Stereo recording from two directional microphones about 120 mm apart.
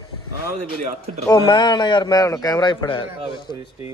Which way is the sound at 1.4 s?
40° left (ahead or behind).